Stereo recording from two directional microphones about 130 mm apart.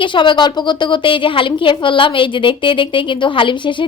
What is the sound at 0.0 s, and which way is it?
A woman's voice, 40° left (ahead or behind).